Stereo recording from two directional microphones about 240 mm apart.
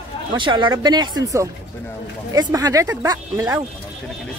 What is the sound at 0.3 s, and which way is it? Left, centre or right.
Speech, centre.